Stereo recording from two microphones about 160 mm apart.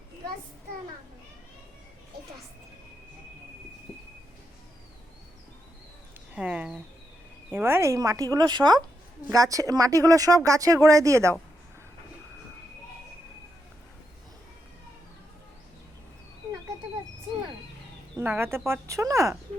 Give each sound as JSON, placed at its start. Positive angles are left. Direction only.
{"t": 6.3, "sound": "a sound", "side_deg": -10}
{"t": 7.5, "sound": "speech", "side_deg": -15}
{"t": 18.2, "sound": "speech", "side_deg": -15}